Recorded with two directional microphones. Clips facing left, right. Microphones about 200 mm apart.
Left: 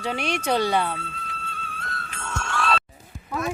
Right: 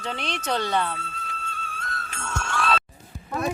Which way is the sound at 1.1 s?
45° right (ahead or behind).